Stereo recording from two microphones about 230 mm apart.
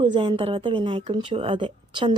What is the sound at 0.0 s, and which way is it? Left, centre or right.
Speech, right.